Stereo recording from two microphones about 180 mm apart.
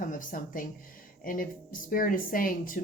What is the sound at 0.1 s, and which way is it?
Speech, 50° left (ahead or behind).